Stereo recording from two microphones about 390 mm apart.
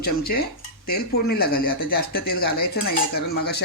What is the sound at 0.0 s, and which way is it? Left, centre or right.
Speech, left.